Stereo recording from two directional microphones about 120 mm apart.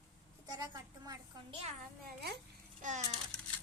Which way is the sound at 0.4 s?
35° right (ahead or behind).